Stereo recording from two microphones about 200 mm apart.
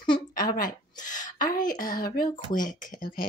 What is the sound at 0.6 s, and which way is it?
A woman's voice, 40° left (ahead or behind).